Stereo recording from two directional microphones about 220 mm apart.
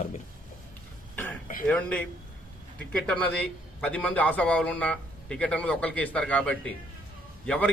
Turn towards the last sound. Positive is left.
turn(degrees=5)  # may be behind; listen again after turning